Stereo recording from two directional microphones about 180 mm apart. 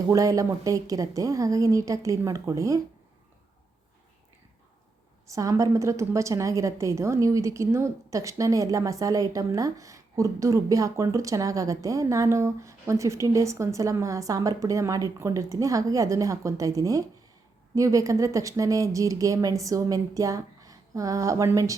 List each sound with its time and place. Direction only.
0.1 s a woman's voice: 20° right (ahead or behind)
5.3 s a woman's voice: 20° right (ahead or behind)